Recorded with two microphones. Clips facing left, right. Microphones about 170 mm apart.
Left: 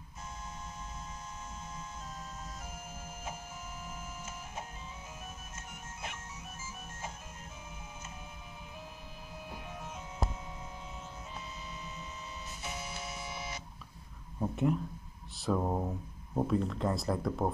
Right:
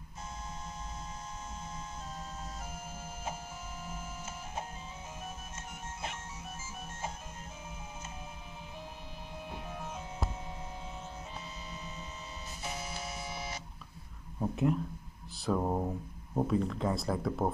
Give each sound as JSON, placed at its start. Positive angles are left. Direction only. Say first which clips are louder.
{"t": 12.6, "sound": "music", "louder": "right 2 dB", "side_deg": -35}
{"t": 14.4, "sound": "speech", "louder": "right 1 dB", "side_deg": 0}